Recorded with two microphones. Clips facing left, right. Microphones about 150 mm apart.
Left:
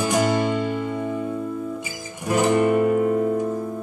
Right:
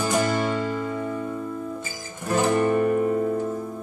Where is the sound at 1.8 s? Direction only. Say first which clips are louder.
Left 3 dB; 15° left (ahead or behind).